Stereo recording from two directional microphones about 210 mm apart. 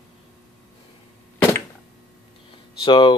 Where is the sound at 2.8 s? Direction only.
25° left (ahead or behind).